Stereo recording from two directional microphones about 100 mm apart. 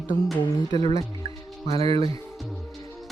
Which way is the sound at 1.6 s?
85° right.